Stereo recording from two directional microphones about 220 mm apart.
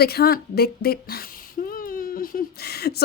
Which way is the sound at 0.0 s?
45° left (ahead or behind).